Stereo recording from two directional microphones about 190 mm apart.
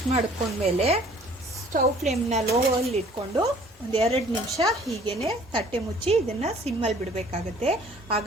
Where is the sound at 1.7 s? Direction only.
45° right (ahead or behind).